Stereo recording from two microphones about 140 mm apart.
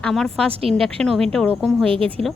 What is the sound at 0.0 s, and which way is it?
Speech, 5° left (ahead or behind).